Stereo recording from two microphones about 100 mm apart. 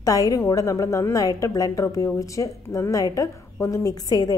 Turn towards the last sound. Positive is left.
turn(degrees=40)  # may be behind; listen again after turning